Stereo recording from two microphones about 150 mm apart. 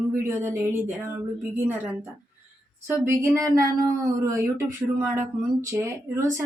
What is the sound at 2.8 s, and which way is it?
A woman's voice, 15° right (ahead or behind).